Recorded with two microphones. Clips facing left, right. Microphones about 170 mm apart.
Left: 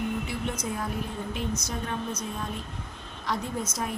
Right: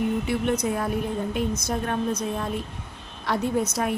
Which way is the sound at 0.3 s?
65° right (ahead or behind).